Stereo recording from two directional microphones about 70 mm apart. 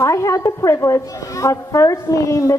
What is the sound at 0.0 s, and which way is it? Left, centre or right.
A woman's voice, left.